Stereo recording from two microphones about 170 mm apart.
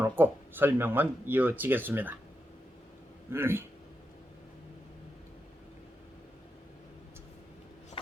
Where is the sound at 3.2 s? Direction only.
15° right (ahead or behind).